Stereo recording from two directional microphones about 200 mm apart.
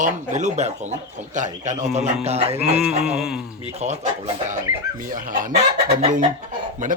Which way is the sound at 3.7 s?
35° right (ahead or behind).